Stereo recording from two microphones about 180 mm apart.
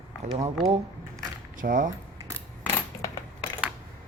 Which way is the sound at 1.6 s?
50° right (ahead or behind).